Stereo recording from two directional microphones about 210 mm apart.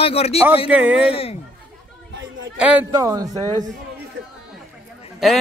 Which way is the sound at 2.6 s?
5° right (ahead or behind).